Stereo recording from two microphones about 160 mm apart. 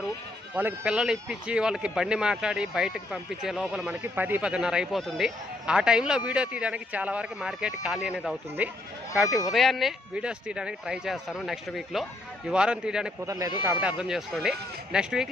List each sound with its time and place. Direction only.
0.5 s speech: 10° right (ahead or behind)
13.2 s speech: 20° right (ahead or behind)
14.0 s speech: centre (ahead or behind)